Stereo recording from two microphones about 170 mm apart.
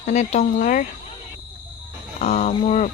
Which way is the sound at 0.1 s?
45° left (ahead or behind).